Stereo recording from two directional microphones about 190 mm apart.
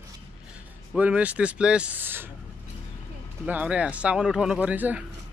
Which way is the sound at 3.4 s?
5° right (ahead or behind).